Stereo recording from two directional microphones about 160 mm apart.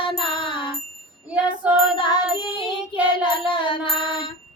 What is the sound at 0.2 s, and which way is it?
Music, 30° left (ahead or behind).